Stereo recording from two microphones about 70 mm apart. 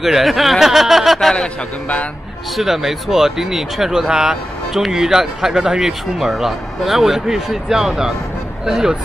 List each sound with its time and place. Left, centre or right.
0.0 s a sound: centre
1.3 s speech: centre
2.5 s speech: centre